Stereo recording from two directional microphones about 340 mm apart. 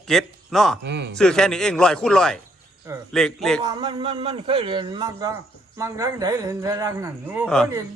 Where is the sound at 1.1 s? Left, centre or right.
Centre.